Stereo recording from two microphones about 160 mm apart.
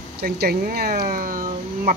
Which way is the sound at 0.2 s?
75° right (ahead or behind).